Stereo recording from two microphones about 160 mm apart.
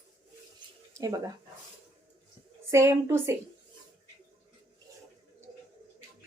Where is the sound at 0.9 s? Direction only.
20° right (ahead or behind).